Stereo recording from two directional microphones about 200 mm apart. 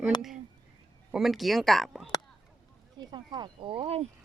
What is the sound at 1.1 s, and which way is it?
Speech, centre (ahead or behind).